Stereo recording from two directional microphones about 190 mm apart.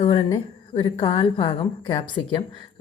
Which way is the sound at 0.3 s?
30° left (ahead or behind).